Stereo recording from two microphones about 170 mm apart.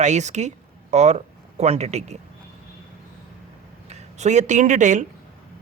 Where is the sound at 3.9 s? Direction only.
40° right (ahead or behind).